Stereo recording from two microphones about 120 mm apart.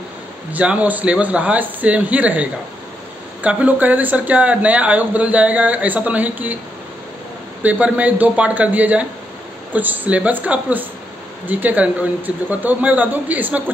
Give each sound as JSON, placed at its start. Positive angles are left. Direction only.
{"t": 0.5, "sound": "speech", "side_deg": -10}
{"t": 7.6, "sound": "speech", "side_deg": -15}